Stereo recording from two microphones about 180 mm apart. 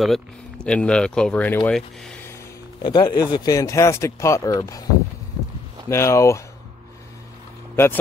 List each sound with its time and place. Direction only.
0.7 s speech: 5° left (ahead or behind)
2.8 s speech: 25° left (ahead or behind)
5.9 s speech: 15° left (ahead or behind)
7.7 s speech: 15° left (ahead or behind)